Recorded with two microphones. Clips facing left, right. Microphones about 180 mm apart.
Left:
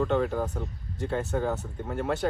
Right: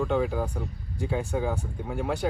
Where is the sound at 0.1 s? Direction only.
5° right (ahead or behind).